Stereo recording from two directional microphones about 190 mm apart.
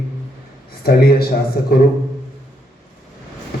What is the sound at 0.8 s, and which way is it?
Speech, 55° left (ahead or behind).